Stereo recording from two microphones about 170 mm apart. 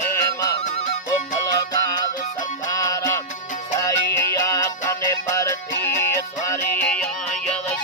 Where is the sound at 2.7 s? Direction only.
20° left (ahead or behind).